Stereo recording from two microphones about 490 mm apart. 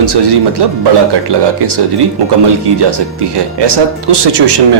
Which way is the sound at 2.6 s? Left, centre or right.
Right.